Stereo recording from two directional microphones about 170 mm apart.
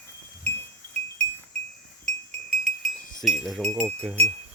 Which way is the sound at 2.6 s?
Centre (ahead or behind).